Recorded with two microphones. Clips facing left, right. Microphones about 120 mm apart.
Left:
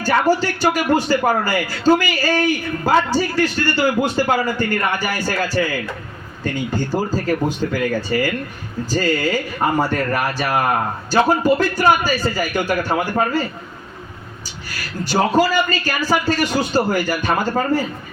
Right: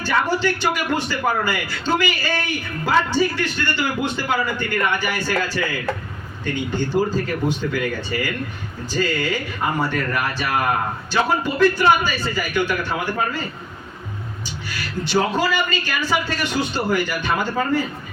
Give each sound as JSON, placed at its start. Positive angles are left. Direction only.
{"t": 0.0, "sound": "a man's voice", "side_deg": 40}
{"t": 15.0, "sound": "a man's voice", "side_deg": 40}